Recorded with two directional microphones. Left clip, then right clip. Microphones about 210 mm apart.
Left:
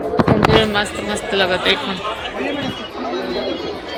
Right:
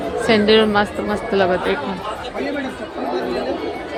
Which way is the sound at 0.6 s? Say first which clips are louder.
Right 1 dB; 20° right (ahead or behind).